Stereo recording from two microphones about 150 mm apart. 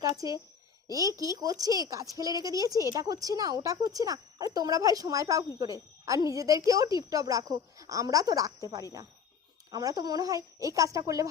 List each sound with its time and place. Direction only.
0.0 s speech: 25° right (ahead or behind)